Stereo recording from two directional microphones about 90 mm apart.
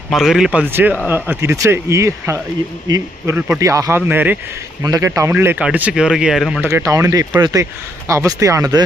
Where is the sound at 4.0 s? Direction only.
20° right (ahead or behind).